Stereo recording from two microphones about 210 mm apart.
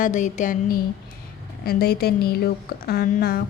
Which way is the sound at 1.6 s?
45° left (ahead or behind).